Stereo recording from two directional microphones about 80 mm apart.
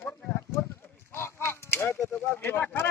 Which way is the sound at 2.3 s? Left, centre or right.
Left.